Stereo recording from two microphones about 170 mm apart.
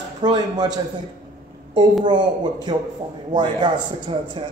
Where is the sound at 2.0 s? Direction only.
25° right (ahead or behind).